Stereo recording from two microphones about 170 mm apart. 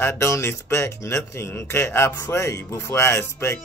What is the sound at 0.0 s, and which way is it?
Speech, 15° left (ahead or behind).